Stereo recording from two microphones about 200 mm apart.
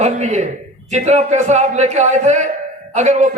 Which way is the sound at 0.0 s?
35° right (ahead or behind).